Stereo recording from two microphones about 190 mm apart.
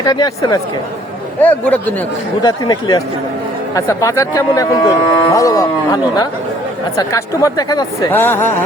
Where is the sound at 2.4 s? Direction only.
20° left (ahead or behind).